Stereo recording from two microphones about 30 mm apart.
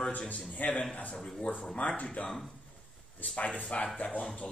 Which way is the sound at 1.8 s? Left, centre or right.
Left.